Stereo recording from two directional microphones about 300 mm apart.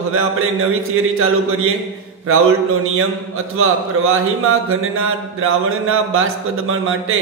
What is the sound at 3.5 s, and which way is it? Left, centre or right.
Mantra, right.